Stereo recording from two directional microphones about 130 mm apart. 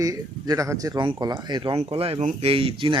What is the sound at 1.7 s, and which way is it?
Speech, 50° right (ahead or behind).